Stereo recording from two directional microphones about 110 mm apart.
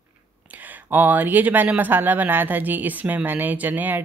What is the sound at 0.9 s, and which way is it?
Speech, 15° right (ahead or behind).